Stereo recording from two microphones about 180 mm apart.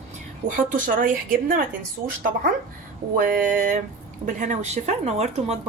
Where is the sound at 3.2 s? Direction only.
50° right (ahead or behind).